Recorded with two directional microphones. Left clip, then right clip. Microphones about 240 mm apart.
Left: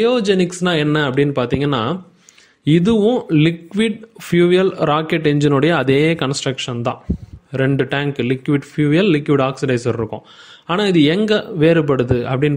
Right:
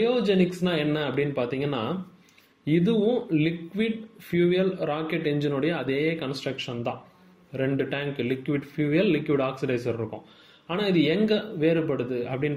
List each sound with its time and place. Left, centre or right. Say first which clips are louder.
0.0 s speech: left 8 dB; left